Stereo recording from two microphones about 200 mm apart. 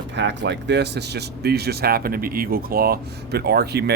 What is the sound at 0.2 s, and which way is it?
Speech, 60° right (ahead or behind).